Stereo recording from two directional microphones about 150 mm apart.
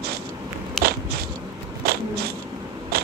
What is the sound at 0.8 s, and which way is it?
Biting, centre (ahead or behind).